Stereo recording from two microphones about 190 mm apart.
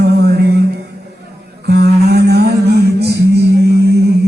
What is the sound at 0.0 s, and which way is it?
Music, 55° right (ahead or behind).